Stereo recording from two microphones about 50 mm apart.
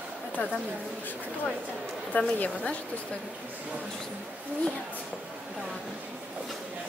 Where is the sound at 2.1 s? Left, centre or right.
Left.